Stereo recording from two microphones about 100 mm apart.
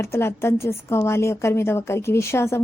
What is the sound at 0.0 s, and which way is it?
A woman's voice, 25° left (ahead or behind).